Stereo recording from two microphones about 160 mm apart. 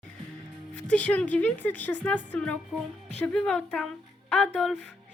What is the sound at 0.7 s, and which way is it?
Speech, 10° left (ahead or behind).